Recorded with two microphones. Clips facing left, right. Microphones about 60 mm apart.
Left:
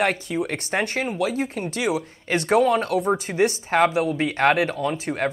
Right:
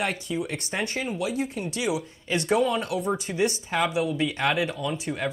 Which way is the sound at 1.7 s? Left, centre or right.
Left.